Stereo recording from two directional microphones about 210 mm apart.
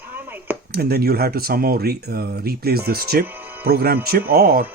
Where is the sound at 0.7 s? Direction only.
50° right (ahead or behind).